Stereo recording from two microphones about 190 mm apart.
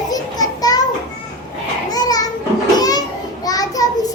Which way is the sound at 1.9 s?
20° left (ahead or behind).